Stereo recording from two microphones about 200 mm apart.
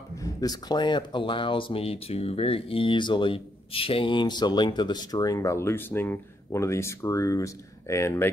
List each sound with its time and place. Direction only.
0.2 s speech: 20° left (ahead or behind)